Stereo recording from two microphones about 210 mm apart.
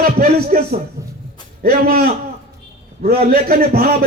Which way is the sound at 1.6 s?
45° right (ahead or behind).